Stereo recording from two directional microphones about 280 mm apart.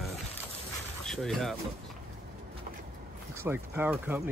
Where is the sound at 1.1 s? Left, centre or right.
Centre.